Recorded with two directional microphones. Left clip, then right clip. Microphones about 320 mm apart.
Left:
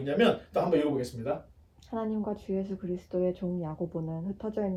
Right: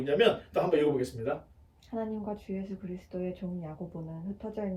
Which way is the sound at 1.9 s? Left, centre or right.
Left.